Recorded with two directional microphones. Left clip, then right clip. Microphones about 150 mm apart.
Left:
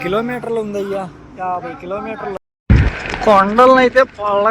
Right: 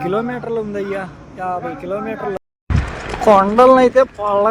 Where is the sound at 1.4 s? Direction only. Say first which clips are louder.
Left 1 dB; 5° right (ahead or behind).